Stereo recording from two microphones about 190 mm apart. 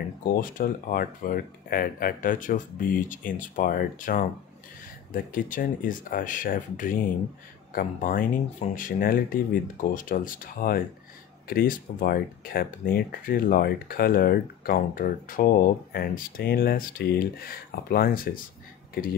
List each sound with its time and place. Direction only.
0.2 s speech: 45° left (ahead or behind)